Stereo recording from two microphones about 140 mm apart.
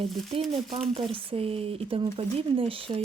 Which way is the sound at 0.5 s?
40° right (ahead or behind).